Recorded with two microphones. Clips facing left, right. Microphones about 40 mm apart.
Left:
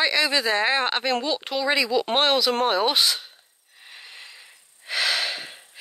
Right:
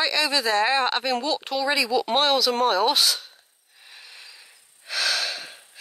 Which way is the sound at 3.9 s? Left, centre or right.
Left.